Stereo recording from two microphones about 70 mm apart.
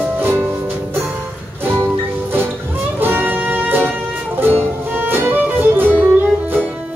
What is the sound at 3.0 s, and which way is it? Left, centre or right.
Music, right.